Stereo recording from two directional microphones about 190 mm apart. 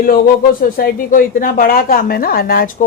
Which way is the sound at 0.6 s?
50° left (ahead or behind).